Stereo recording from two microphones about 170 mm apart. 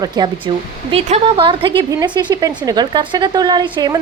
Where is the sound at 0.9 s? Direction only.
40° right (ahead or behind).